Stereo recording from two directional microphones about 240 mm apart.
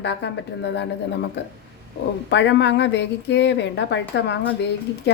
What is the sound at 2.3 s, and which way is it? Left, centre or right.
A woman's voice, left.